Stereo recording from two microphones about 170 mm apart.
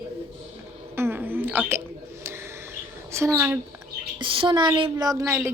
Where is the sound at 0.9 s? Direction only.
15° right (ahead or behind).